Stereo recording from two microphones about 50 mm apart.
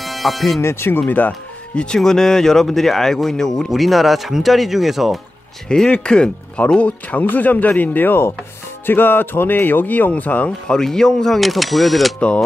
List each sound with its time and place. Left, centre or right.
0.0 s music: centre
0.6 s speech: left
2.0 s speech: centre
3.7 s speech: centre
5.7 s speech: centre
10.7 s speech: centre